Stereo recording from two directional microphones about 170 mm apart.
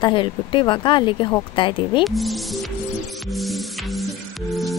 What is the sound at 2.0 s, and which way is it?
Music, centre (ahead or behind).